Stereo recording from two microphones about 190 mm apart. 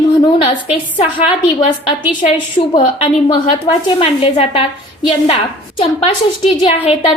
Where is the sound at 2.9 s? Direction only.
30° left (ahead or behind).